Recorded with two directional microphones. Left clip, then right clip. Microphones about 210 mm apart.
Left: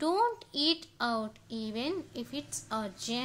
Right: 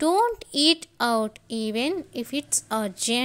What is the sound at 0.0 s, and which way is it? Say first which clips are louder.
A woman's voice: right 7 dB; 30° right (ahead or behind).